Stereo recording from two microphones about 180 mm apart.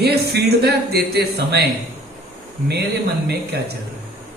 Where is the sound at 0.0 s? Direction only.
65° right (ahead or behind).